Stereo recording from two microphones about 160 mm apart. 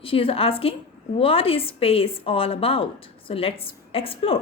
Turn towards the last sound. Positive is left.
turn(degrees=35)  # may be behind; listen again after turning